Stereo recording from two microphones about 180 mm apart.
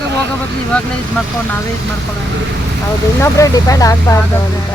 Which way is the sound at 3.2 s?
20° left (ahead or behind).